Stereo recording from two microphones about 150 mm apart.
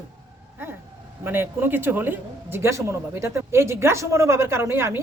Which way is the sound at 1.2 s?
15° right (ahead or behind).